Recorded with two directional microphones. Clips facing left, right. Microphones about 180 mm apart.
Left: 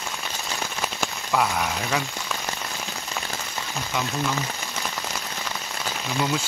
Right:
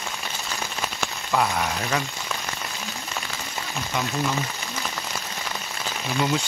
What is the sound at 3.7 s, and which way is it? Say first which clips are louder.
Speech: right 1 dB; centre (ahead or behind).